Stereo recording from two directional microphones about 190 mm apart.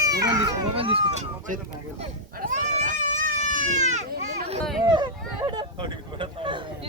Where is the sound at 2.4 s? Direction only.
40° right (ahead or behind).